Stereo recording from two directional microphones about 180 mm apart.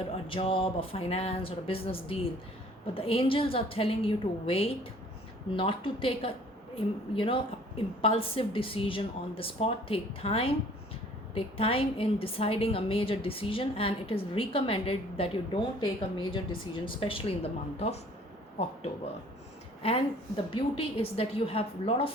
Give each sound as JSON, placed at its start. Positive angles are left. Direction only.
{"t": 0.0, "sound": "a woman's voice", "side_deg": 30}
{"t": 19.8, "sound": "a woman's voice", "side_deg": 30}